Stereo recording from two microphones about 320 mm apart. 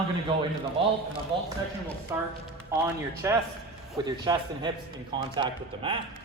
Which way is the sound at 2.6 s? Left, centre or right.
Centre.